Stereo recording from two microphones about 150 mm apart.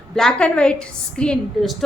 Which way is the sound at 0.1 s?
5° left (ahead or behind).